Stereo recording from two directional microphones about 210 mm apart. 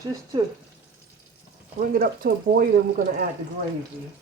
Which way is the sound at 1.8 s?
40° right (ahead or behind).